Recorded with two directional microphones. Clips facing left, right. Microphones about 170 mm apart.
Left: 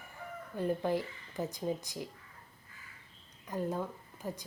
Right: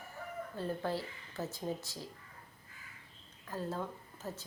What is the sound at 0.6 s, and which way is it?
Speech, 15° left (ahead or behind).